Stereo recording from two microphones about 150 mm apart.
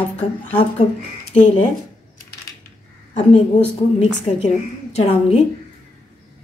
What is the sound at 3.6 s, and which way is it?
Speech, 55° left (ahead or behind).